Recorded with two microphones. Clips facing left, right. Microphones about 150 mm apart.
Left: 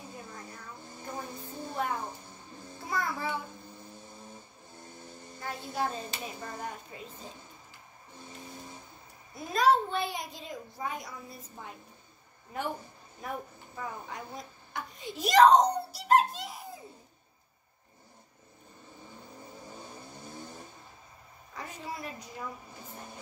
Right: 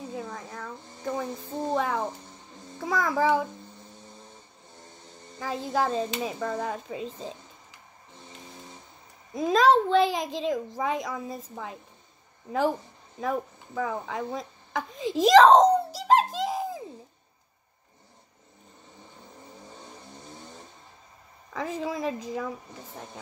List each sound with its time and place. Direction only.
0.1 s a sound: 90° right
5.4 s a child's voice: 90° right
9.3 s a child's voice: 90° right
13.2 s a child's voice: 90° right
14.7 s wail: 90° right
20.3 s vehicle: 20° right (ahead or behind)
21.5 s a child's voice: 90° right